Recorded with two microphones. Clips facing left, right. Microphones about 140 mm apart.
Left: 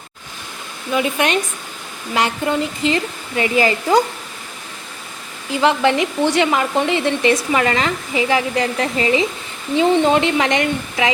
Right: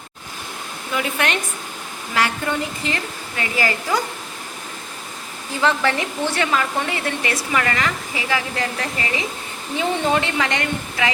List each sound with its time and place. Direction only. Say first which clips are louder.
0.9 s speech: left 5 dB; 20° left (ahead or behind)
5.6 s speech: left 4 dB; 20° left (ahead or behind)